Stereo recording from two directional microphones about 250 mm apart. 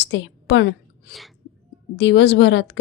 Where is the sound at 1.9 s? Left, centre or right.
Left.